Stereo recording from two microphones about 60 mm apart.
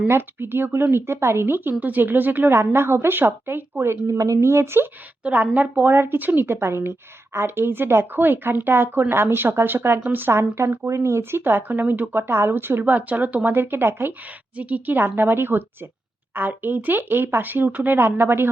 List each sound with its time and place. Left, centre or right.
0.1 s speech: right
4.0 s a woman's voice: right
5.2 s a woman's voice: right
12.8 s speech: right
14.5 s a woman's voice: right
14.9 s speech: right